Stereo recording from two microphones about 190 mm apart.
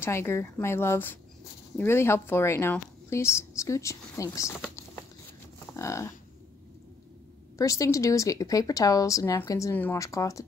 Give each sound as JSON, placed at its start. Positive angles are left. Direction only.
{"t": 0.0, "sound": "speech", "side_deg": 15}
{"t": 5.8, "sound": "cattle", "side_deg": 15}
{"t": 7.5, "sound": "speech", "side_deg": 15}